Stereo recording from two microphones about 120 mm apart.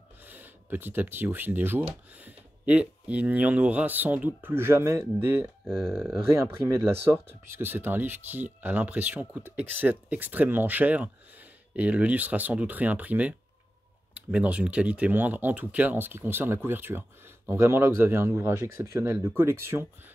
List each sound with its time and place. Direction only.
0.2 s speech: 15° right (ahead or behind)
5.7 s speech: centre (ahead or behind)
6.7 s speech: 20° right (ahead or behind)